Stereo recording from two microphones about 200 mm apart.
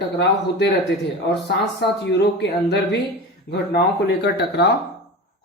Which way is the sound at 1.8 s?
55° left (ahead or behind).